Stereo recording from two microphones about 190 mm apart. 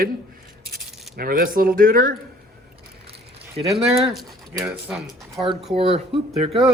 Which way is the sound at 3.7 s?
15° right (ahead or behind).